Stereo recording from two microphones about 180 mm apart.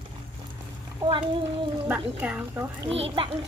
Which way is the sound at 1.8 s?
10° right (ahead or behind).